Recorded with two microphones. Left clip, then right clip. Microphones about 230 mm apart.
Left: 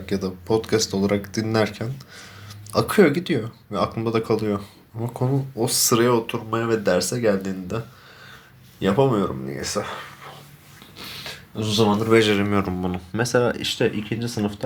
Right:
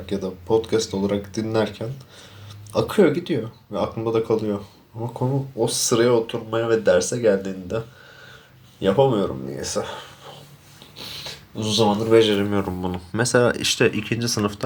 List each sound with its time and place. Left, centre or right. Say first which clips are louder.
0.0 s speech: even; left
5.5 s speech: even; left
8.8 s speech: right 2 dB; left
13.1 s speech: right 2 dB; centre